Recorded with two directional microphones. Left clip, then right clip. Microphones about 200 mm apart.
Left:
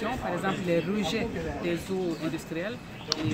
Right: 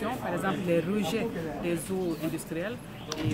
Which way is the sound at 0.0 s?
5° right (ahead or behind).